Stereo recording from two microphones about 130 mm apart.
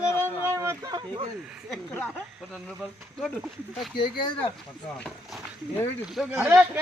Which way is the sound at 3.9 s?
35° left (ahead or behind).